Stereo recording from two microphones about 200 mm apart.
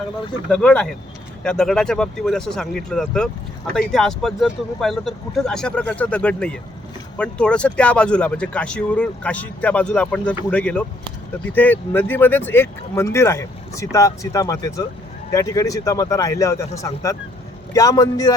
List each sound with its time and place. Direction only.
0.5 s a man's voice: 5° left (ahead or behind)